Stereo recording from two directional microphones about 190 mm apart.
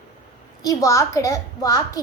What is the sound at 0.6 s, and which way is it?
A child's voice, 15° left (ahead or behind).